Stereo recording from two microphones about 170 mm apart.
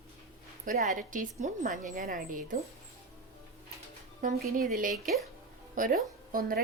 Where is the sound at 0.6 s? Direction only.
50° right (ahead or behind).